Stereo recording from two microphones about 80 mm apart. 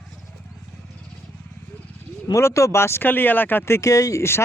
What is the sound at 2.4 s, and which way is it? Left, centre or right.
Speech, left.